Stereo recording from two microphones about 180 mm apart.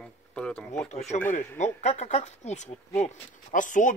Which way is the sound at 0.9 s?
40° left (ahead or behind).